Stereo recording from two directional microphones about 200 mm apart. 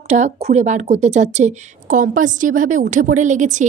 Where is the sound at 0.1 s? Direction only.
35° right (ahead or behind).